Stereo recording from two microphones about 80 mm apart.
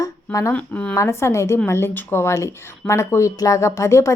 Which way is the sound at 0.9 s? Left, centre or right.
Left.